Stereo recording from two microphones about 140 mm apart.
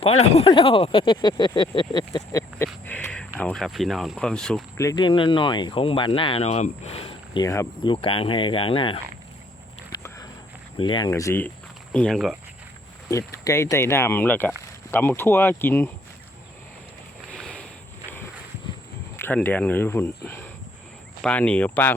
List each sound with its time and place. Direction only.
0.0 s speech: 45° left (ahead or behind); by 2.4 s 30° left (ahead or behind)
2.8 s a sound: 10° left (ahead or behind)
3.4 s speech: 5° left (ahead or behind)
4.8 s speech: 25° left (ahead or behind)
5.0 s speech: 35° left (ahead or behind)
7.4 s speech: 20° left (ahead or behind)
7.9 s speech: 40° left (ahead or behind)
10.8 s speech: 35° left (ahead or behind)
11.1 s speech: 20° left (ahead or behind)
11.9 s speech: 5° left (ahead or behind)
13.1 s speech: 20° left (ahead or behind)
17.3 s a sound: 5° left (ahead or behind)
19.1 s speech: 15° left (ahead or behind)